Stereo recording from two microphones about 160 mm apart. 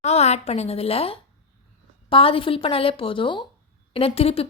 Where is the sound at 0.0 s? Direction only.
45° left (ahead or behind).